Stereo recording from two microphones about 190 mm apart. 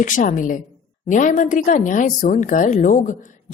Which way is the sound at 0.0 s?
45° left (ahead or behind).